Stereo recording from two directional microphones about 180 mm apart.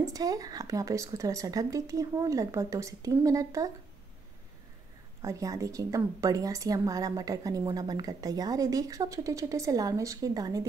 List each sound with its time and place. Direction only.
0.0 s a woman's voice: 20° right (ahead or behind)
5.2 s a woman's voice: 20° right (ahead or behind)